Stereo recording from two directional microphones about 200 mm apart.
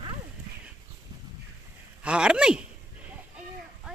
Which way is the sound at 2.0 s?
5° right (ahead or behind).